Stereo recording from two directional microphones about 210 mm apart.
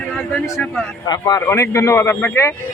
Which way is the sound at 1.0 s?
20° left (ahead or behind).